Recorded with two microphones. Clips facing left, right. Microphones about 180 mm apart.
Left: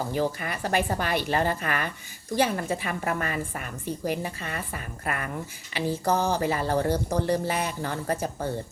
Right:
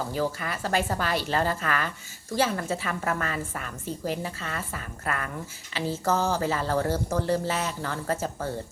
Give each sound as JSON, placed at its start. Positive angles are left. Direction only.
{"t": 0.1, "sound": "a woman's voice", "side_deg": 15}